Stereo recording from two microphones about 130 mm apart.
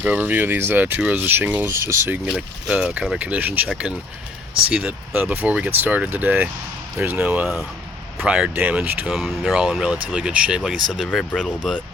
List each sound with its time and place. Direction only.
0.0 s speech: 15° right (ahead or behind); by 11.8 s 5° left (ahead or behind)